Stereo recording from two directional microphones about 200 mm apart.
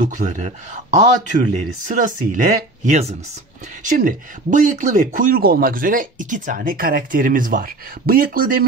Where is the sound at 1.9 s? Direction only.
40° right (ahead or behind).